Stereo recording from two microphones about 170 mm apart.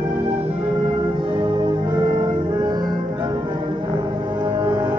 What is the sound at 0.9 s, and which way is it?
Music, 30° right (ahead or behind).